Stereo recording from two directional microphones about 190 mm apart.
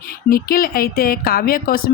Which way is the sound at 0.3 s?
50° left (ahead or behind).